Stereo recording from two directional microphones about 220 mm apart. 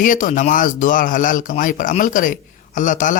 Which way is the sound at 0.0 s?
35° left (ahead or behind).